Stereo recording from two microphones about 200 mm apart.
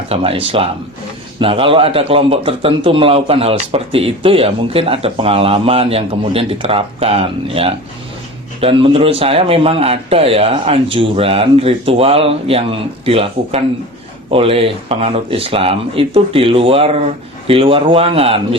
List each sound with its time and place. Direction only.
0.1 s a man's voice: 30° right (ahead or behind)